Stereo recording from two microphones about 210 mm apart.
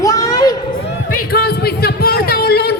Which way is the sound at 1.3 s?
50° left (ahead or behind).